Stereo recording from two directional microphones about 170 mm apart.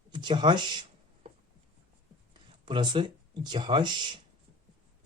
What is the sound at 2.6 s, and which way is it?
Speech, 30° right (ahead or behind).